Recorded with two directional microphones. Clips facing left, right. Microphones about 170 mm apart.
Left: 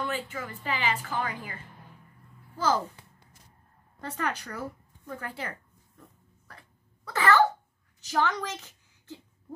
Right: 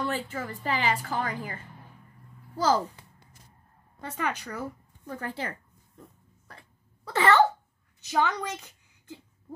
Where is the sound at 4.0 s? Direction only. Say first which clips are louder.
Right 1 dB; 10° right (ahead or behind).